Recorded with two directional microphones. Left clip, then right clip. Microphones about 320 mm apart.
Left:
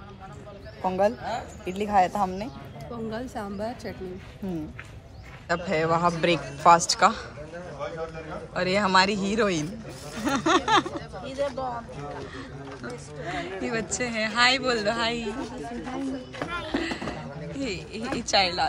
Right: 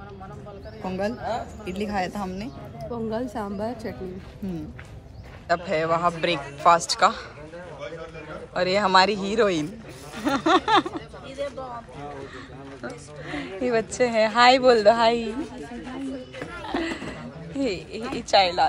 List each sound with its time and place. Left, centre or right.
0.8 s speech: centre
3.1 s speech: centre
5.5 s a man's voice: centre
8.5 s speech: centre
13.2 s speech: centre
16.6 s a sound: centre
18.1 s speech: centre